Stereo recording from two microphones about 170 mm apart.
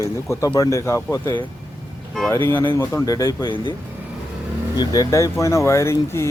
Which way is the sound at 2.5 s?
15° left (ahead or behind).